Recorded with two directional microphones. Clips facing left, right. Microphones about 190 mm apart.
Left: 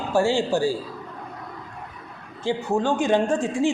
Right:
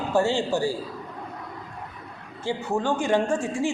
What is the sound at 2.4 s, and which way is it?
Speech, 15° left (ahead or behind).